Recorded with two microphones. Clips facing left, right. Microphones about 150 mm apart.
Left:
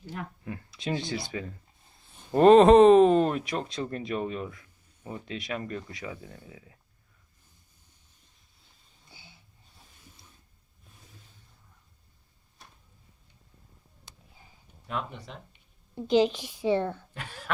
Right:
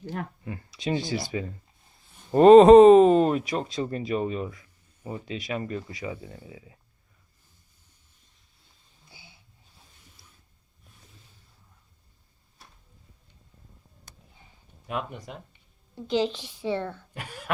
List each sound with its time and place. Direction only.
0.0 s speech: 45° right (ahead or behind)
0.4 s speech: centre (ahead or behind)
14.8 s speech: 10° right (ahead or behind)
16.0 s a woman's voice: 15° left (ahead or behind)
17.2 s speech: 10° right (ahead or behind)